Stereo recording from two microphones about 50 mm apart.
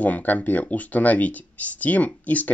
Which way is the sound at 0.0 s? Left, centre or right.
Left.